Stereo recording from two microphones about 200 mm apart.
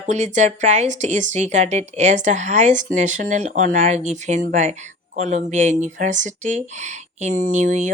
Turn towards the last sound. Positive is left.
turn(degrees=-40)  # may be behind; listen again after turning